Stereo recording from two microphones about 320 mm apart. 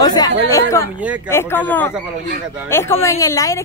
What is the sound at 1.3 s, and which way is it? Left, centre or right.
Speech, centre.